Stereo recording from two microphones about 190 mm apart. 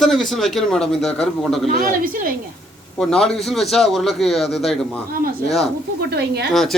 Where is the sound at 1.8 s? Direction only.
45° right (ahead or behind).